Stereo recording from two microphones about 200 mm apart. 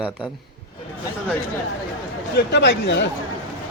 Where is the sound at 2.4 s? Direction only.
55° left (ahead or behind).